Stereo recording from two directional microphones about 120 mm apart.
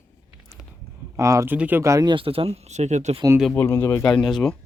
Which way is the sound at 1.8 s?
25° right (ahead or behind).